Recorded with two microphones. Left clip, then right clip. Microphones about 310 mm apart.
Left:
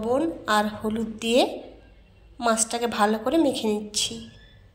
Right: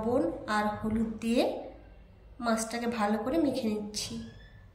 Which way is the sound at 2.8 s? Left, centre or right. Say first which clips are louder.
Left 11 dB; left.